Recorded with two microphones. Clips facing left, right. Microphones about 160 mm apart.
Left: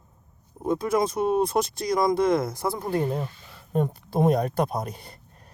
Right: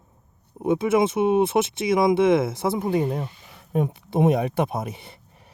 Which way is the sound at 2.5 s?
20° right (ahead or behind).